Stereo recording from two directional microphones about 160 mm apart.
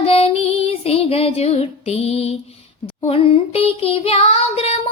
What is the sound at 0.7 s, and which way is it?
Music, 40° left (ahead or behind).